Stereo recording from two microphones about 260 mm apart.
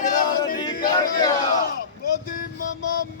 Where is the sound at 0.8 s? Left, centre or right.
Left.